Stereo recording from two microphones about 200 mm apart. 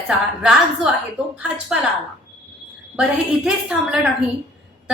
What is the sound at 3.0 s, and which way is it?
A woman's voice, 5° right (ahead or behind).